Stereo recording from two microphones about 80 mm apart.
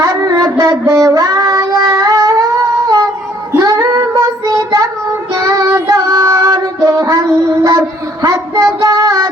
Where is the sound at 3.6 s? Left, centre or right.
Right.